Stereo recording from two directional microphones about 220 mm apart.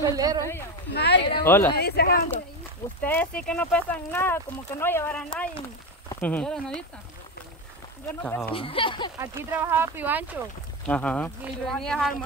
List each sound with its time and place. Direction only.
0.0 s speech: 15° right (ahead or behind)
0.9 s speech: 50° left (ahead or behind)
1.4 s speech: 10° left (ahead or behind)
1.8 s speech: 45° left (ahead or behind)
3.0 s speech: 5° left (ahead or behind)
8.2 s speech: 5° left (ahead or behind)
8.5 s speech: 25° left (ahead or behind)
9.2 s speech: 10° right (ahead or behind)
10.9 s speech: 5° left (ahead or behind)